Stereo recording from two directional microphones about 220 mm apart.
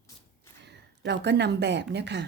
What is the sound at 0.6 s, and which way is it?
Speech, 50° right (ahead or behind).